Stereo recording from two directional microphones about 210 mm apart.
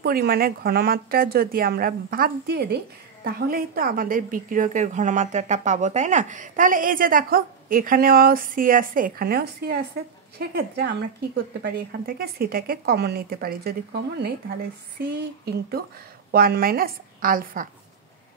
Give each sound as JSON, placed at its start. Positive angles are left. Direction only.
{"t": 0.0, "sound": "a woman's voice", "side_deg": -45}